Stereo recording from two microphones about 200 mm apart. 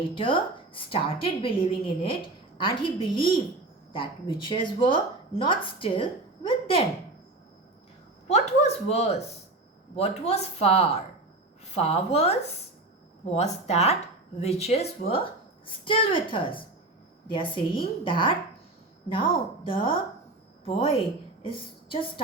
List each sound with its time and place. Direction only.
0.1 s a woman's voice: 25° left (ahead or behind)
8.3 s a woman's voice: 30° left (ahead or behind)